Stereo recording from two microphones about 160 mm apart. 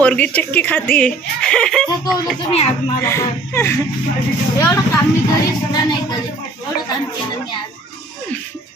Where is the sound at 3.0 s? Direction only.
15° left (ahead or behind).